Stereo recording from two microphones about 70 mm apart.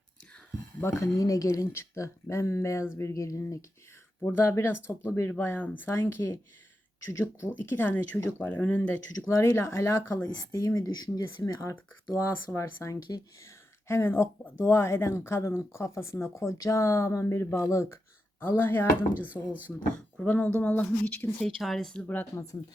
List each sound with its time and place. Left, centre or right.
0.8 s speech: left
4.2 s speech: left
9.2 s speech: left
10.3 s speech: left
19.3 s speech: right
20.2 s speech: left
21.4 s speech: centre
22.0 s speech: left